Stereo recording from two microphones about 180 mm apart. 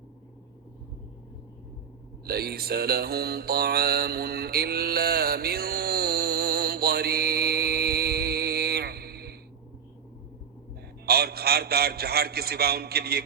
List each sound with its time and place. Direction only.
2.2 s mantra: 60° right (ahead or behind)
11.0 s a man's voice: 60° right (ahead or behind)